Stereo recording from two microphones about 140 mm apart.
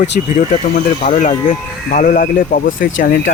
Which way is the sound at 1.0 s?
65° left (ahead or behind).